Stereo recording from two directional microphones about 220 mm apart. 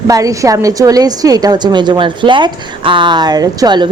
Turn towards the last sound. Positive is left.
turn(degrees=-20)  # may be behind; listen again after turning